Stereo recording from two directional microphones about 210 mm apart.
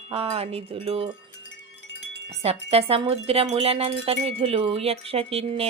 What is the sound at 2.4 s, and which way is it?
Speech, 30° right (ahead or behind).